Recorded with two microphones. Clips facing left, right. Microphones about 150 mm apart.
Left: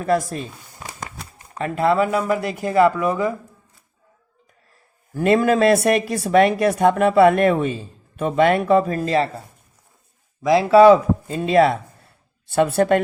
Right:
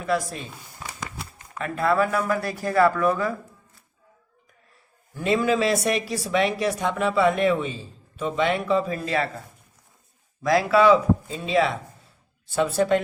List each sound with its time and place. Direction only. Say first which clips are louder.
0.0 s a woman's voice: left 5 dB; 45° left (ahead or behind)
1.4 s speech: left 5 dB; 30° left (ahead or behind)
5.1 s a woman's voice: left 5 dB; 50° left (ahead or behind)
10.4 s speech: left 4 dB; 25° left (ahead or behind)
10.7 s speech: left 7 dB; 40° left (ahead or behind); by 13.0 s 55° left (ahead or behind)